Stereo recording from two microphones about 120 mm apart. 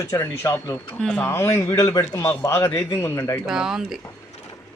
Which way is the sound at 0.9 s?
5° left (ahead or behind).